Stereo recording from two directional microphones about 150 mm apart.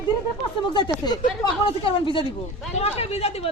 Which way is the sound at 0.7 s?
30° left (ahead or behind).